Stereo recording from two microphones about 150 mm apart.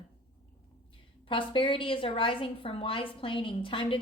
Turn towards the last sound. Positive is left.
turn(degrees=35)  # may be behind; listen again after turning